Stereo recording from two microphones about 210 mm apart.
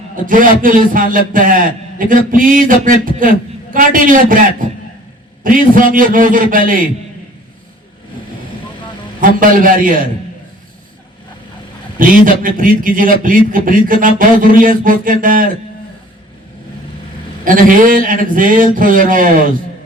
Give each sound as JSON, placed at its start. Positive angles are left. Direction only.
{"t": 0.3, "sound": "a man's voice", "side_deg": -40}
{"t": 9.2, "sound": "a man's voice", "side_deg": -40}
{"t": 11.9, "sound": "a man's voice", "side_deg": -40}
{"t": 17.4, "sound": "a man's voice", "side_deg": -40}